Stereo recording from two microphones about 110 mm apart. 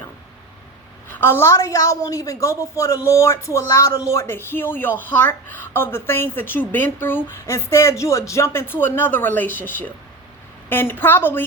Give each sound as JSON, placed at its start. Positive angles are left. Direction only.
{"t": 1.1, "sound": "a woman's voice", "side_deg": 20}